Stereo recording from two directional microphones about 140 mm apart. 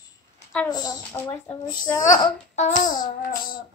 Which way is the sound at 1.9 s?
25° left (ahead or behind).